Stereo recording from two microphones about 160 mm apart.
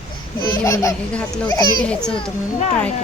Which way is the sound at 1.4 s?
25° left (ahead or behind).